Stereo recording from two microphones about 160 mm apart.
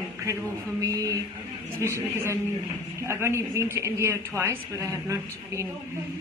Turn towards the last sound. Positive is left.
turn(degrees=-20)  # may be behind; listen again after turning